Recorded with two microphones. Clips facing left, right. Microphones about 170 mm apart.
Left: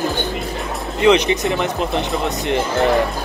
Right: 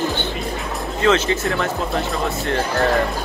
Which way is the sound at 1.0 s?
15° left (ahead or behind).